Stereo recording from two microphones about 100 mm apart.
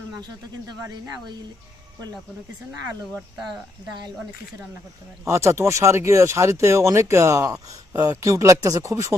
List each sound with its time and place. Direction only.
3.4 s speech: centre (ahead or behind)
5.3 s speech: 30° right (ahead or behind)